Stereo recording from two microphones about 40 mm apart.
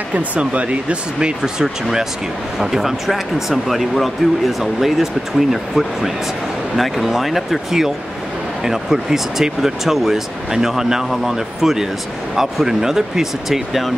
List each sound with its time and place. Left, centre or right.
0.1 s speech: right
1.4 s speech: centre